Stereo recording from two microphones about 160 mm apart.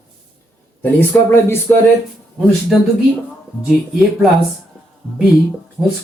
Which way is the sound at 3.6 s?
Centre (ahead or behind).